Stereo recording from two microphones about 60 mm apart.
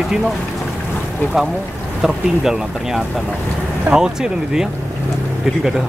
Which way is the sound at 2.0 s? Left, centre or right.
Centre.